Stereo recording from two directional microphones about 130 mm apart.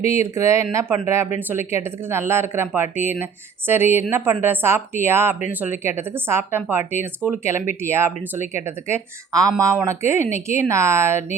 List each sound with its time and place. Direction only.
0.2 s a woman's voice: 20° right (ahead or behind)